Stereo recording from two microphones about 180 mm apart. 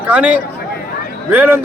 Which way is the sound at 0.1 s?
10° right (ahead or behind).